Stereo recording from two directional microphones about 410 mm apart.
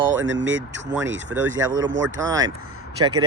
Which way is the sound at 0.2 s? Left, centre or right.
Right.